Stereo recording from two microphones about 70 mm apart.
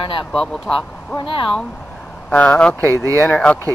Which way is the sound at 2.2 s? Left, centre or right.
Centre.